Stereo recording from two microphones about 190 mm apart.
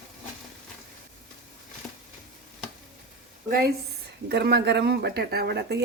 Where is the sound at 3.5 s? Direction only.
55° right (ahead or behind).